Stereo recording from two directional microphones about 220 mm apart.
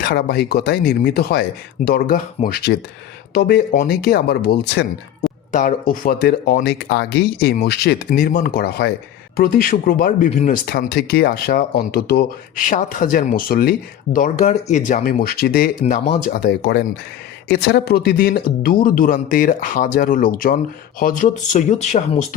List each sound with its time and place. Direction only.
0.0 s speech: 45° left (ahead or behind)